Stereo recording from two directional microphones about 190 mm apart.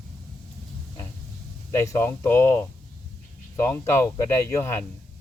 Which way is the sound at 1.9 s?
15° left (ahead or behind).